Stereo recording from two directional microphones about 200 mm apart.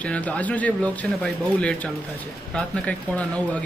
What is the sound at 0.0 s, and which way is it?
Speech, 5° left (ahead or behind).